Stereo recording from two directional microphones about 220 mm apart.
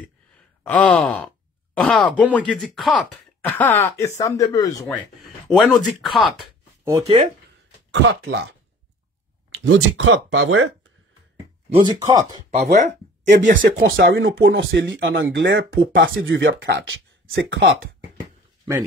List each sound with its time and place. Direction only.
0.7 s sigh: 5° left (ahead or behind)
2.3 s speech: 5° left (ahead or behind)
5.2 s speech: centre (ahead or behind)
6.8 s speech: 20° right (ahead or behind)
7.9 s speech: 55° right (ahead or behind)
9.5 s speech: 60° right (ahead or behind)
11.9 s speech: 15° right (ahead or behind)
12.4 s speech: 30° right (ahead or behind)
13.7 s speech: 55° right (ahead or behind)